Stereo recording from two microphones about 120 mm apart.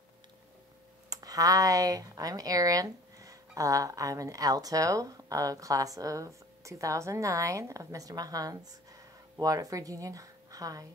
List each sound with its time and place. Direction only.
1.1 s speech: 30° right (ahead or behind)